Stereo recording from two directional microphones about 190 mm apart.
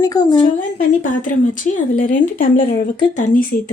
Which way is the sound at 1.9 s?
45° left (ahead or behind).